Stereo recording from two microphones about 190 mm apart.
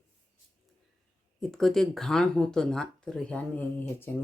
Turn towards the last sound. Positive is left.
turn(degrees=10)  # may be behind; listen again after turning